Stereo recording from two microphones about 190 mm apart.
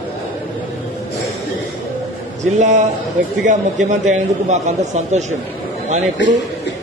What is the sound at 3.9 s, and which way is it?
Speech, 40° right (ahead or behind).